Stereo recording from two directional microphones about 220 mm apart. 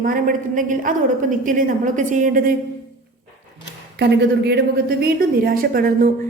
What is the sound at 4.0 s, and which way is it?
A woman's voice, 50° right (ahead or behind).